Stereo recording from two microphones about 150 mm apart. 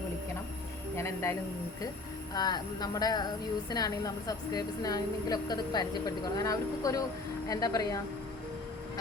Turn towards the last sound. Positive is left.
turn(degrees=25)  # may be behind; listen again after turning